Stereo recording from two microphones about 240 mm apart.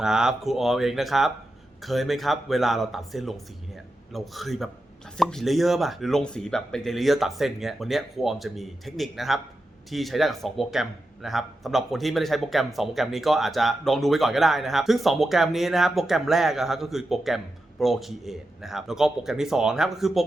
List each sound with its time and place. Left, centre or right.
0.0 s speech: centre